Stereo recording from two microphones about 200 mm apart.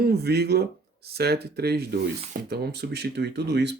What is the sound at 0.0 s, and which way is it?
Speech, 55° right (ahead or behind).